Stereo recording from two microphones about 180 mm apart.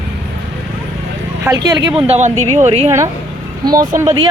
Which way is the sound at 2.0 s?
40° right (ahead or behind).